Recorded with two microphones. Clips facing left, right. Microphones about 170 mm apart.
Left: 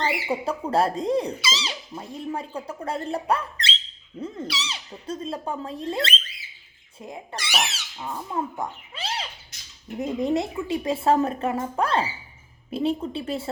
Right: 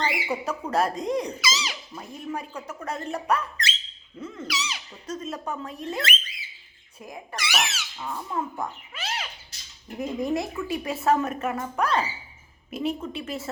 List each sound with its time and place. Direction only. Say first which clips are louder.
0.3 s speech: left 3 dB; 30° left (ahead or behind)
7.7 s speech: even; 20° left (ahead or behind)